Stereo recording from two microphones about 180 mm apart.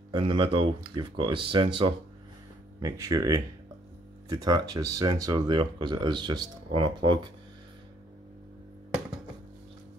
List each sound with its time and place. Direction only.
0.1 s speech: 30° right (ahead or behind)
2.8 s speech: 20° right (ahead or behind)